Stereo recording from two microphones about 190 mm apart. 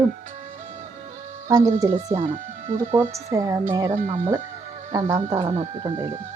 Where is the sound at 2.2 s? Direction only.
40° right (ahead or behind).